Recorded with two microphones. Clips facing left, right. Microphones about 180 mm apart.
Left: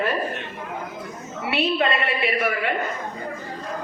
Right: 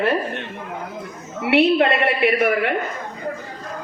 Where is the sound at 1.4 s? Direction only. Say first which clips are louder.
Right 7 dB; 65° right (ahead or behind).